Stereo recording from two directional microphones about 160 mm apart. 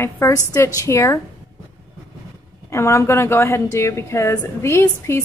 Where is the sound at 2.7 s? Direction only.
15° left (ahead or behind).